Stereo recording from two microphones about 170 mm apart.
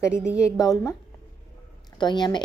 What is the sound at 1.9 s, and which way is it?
Speech, 25° left (ahead or behind).